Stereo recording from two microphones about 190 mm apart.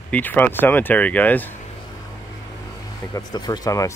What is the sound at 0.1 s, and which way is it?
Speech, 10° left (ahead or behind).